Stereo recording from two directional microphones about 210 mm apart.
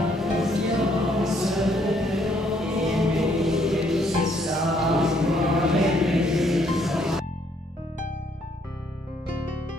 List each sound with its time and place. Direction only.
0.1 s music: centre (ahead or behind)